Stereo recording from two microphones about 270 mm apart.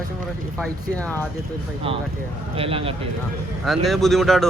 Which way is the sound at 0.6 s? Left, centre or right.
Centre.